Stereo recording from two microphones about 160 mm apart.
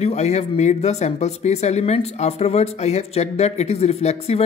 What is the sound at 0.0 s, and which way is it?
Speech, 45° left (ahead or behind).